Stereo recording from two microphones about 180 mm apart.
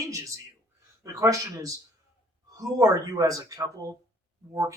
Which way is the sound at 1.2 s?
20° right (ahead or behind).